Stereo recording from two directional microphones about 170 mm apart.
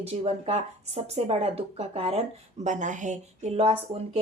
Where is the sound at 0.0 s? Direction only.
35° right (ahead or behind).